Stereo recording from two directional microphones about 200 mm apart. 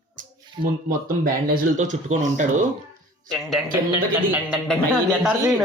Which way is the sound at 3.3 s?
Centre (ahead or behind).